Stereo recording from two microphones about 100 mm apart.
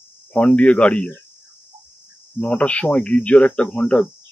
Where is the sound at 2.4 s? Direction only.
10° left (ahead or behind).